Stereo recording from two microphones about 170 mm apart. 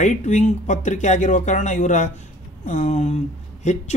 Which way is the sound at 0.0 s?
45° left (ahead or behind).